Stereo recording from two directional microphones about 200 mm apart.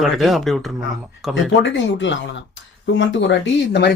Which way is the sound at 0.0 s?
Centre (ahead or behind).